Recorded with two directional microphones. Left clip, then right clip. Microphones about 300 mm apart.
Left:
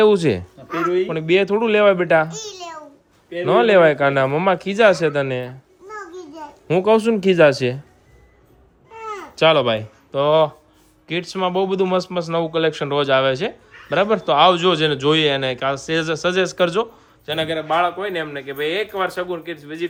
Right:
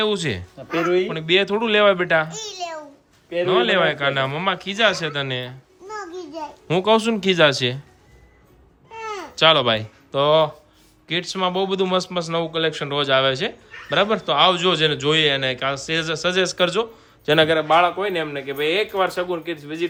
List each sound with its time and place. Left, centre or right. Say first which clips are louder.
0.0 s a man's voice: left 7 dB; centre
3.4 s a child's voice: left 5 dB; centre
9.0 s a man's voice: even; centre
17.2 s a man's voice: right 6 dB; right
17.6 s a man's voice: right 2 dB; centre